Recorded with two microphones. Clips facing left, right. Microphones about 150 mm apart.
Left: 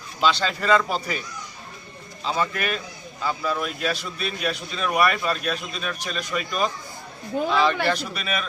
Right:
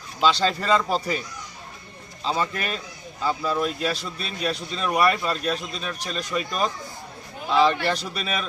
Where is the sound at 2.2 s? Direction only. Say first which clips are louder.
Left 1 dB; 30° right (ahead or behind).